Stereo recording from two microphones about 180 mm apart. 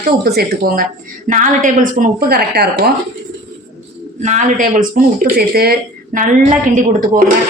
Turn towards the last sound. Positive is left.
turn(degrees=-45)  # may be behind; listen again after turning